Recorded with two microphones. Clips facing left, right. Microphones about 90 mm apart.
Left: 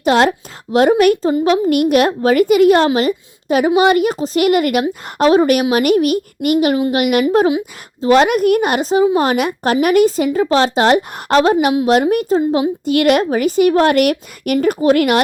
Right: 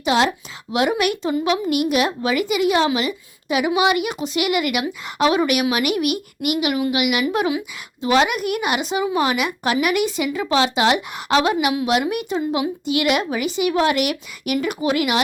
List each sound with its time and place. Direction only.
0.0 s a woman's voice: 50° left (ahead or behind)
1.7 s a woman's voice: 50° left (ahead or behind)
8.0 s a woman's voice: 45° left (ahead or behind)